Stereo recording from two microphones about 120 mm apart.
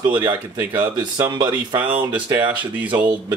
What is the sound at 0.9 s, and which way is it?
Speech, 35° right (ahead or behind).